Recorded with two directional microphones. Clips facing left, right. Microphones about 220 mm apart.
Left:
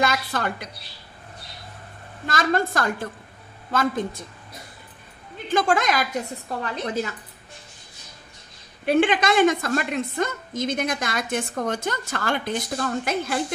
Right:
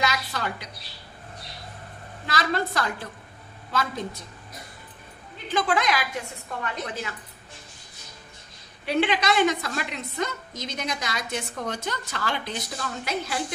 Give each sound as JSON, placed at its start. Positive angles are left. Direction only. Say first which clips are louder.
{"t": 0.0, "sound": "a woman's voice", "louder": "left 4 dB", "side_deg": 50}
{"t": 2.2, "sound": "a woman's voice", "louder": "left 4 dB", "side_deg": 50}
{"t": 5.5, "sound": "a woman's voice", "louder": "left 3 dB", "side_deg": 45}
{"t": 8.8, "sound": "a woman's voice", "louder": "left 4 dB", "side_deg": 50}